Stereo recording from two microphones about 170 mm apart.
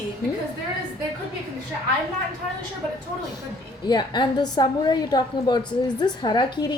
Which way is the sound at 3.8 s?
25° left (ahead or behind).